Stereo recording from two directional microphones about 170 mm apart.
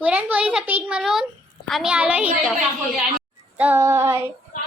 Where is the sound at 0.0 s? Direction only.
10° right (ahead or behind).